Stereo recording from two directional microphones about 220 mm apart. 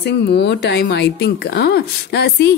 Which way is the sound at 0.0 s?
50° left (ahead or behind).